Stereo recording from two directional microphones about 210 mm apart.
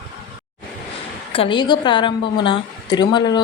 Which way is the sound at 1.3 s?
25° left (ahead or behind).